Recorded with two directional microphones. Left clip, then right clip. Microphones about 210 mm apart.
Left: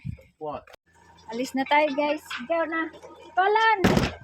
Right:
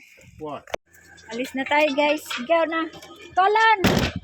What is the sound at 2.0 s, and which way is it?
Speech, 10° right (ahead or behind).